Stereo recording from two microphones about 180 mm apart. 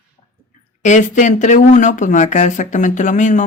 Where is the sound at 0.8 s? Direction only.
40° left (ahead or behind).